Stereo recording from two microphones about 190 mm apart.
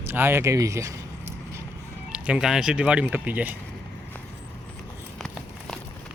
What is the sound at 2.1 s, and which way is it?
Speech, 5° right (ahead or behind).